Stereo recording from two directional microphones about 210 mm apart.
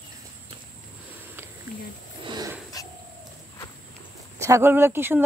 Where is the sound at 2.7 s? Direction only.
15° left (ahead or behind).